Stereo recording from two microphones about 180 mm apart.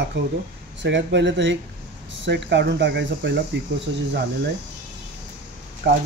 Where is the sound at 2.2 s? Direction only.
75° right (ahead or behind).